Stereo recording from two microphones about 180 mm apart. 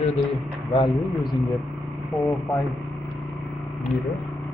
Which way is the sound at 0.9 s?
Centre (ahead or behind).